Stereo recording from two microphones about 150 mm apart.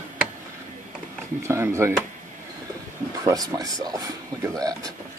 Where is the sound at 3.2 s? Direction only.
25° right (ahead or behind).